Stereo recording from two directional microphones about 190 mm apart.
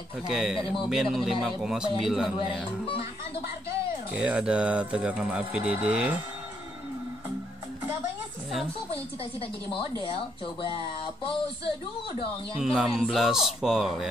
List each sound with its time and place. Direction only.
0.3 s speech: centre (ahead or behind)
4.1 s speech: 5° right (ahead or behind)
9.7 s speech: 25° left (ahead or behind)
12.5 s speech: centre (ahead or behind)